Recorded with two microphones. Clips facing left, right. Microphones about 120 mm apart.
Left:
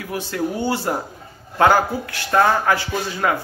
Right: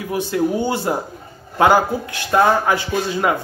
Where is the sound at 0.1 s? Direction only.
15° right (ahead or behind).